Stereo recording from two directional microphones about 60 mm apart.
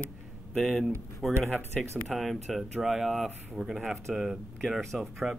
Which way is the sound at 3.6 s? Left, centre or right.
Centre.